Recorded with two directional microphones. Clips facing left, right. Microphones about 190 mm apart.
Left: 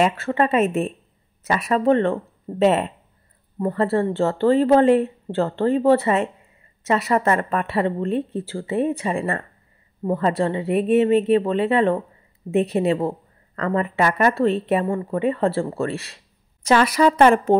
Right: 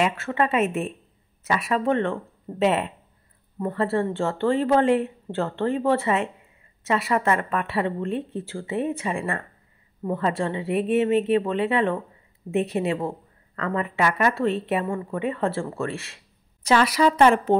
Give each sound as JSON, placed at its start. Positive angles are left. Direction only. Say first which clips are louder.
{"t": 0.0, "sound": "speech", "louder": "left 4 dB", "side_deg": 35}
{"t": 16.6, "sound": "a woman's voice", "louder": "left 3 dB", "side_deg": 50}